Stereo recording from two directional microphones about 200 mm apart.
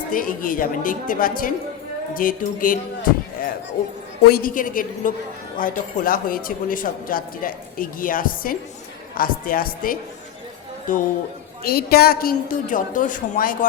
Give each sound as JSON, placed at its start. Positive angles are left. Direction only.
{"t": 0.1, "sound": "speech", "side_deg": 45}
{"t": 4.3, "sound": "speech", "side_deg": 45}